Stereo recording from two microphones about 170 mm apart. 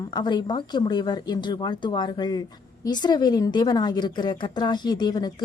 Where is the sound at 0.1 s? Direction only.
25° left (ahead or behind).